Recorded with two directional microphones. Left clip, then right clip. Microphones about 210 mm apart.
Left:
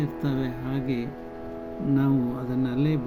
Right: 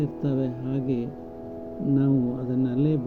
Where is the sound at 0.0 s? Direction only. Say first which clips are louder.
Right 2 dB; 20° left (ahead or behind).